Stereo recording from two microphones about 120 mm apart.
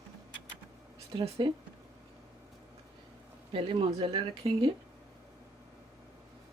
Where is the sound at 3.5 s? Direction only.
50° right (ahead or behind).